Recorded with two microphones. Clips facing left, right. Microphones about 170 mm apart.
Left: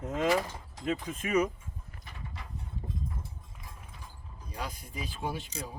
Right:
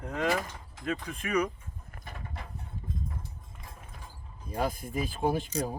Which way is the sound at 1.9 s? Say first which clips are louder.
Right 5 dB; 50° right (ahead or behind).